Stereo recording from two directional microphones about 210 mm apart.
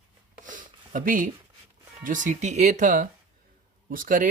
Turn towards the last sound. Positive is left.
turn(degrees=-40)  # may be behind; listen again after turning